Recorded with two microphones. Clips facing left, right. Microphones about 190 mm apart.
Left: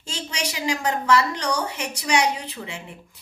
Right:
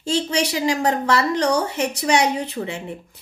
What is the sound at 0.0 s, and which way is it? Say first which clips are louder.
A woman's voice: right 10 dB; 35° right (ahead or behind).